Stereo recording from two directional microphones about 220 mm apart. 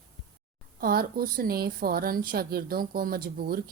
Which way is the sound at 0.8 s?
40° right (ahead or behind).